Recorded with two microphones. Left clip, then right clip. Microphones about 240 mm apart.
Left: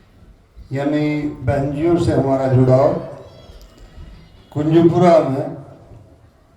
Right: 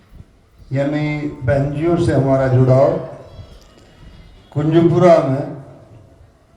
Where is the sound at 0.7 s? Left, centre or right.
Left.